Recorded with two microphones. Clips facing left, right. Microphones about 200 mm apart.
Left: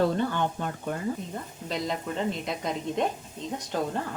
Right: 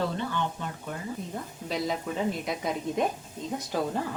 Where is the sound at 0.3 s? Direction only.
50° left (ahead or behind).